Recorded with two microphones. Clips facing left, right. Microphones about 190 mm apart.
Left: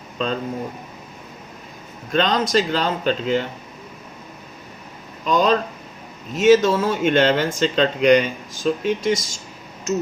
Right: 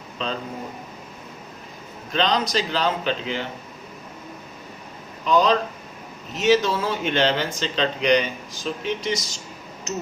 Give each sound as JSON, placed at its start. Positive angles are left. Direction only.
{"t": 0.2, "sound": "speech", "side_deg": 50}
{"t": 2.1, "sound": "speech", "side_deg": 50}
{"t": 5.2, "sound": "speech", "side_deg": 45}